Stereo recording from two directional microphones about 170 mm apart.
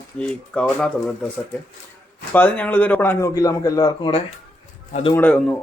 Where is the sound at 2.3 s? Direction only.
10° left (ahead or behind).